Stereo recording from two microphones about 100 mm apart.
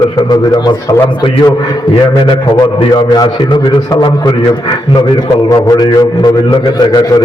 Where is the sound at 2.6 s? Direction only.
50° left (ahead or behind).